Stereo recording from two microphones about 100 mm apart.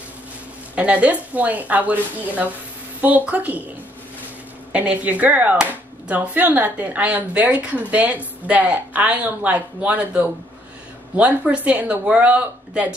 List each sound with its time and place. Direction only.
0.7 s speech: 15° right (ahead or behind)
4.7 s speech: 15° right (ahead or behind)